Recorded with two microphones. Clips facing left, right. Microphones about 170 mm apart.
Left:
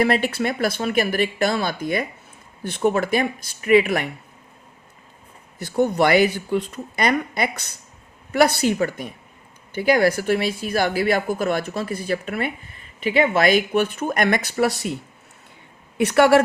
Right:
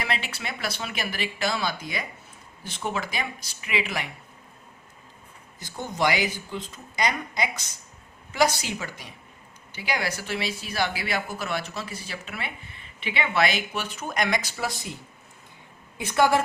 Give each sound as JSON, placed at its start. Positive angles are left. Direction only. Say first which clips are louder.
{"t": 0.0, "sound": "speech", "louder": "left 12 dB", "side_deg": 50}
{"t": 5.5, "sound": "speech", "louder": "left 10 dB", "side_deg": 65}
{"t": 16.0, "sound": "speech", "louder": "left 7 dB", "side_deg": 70}